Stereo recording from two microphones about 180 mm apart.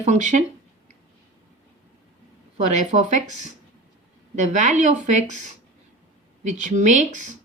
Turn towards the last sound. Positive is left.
turn(degrees=-45)  # may be behind; listen again after turning